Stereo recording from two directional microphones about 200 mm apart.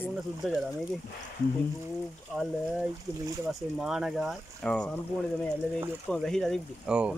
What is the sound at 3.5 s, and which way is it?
Speech, centre (ahead or behind).